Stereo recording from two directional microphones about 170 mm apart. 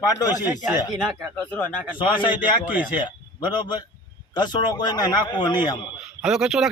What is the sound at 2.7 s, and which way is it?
Speech, 10° right (ahead or behind).